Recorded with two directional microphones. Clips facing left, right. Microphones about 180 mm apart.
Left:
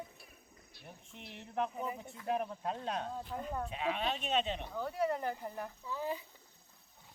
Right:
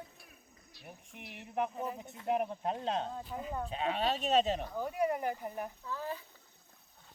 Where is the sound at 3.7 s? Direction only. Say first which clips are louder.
Right 5 dB; 35° right (ahead or behind).